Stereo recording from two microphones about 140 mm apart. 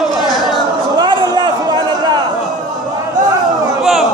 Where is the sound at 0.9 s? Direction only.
30° right (ahead or behind).